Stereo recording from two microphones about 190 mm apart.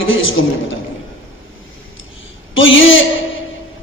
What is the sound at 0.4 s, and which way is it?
Speech, 80° left.